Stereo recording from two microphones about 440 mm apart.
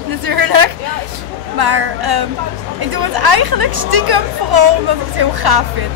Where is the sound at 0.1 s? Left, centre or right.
Right.